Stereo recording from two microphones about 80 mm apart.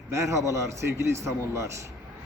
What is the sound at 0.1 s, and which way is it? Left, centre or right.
A man's voice, right.